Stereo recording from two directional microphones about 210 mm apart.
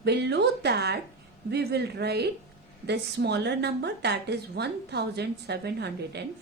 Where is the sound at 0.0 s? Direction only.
50° right (ahead or behind).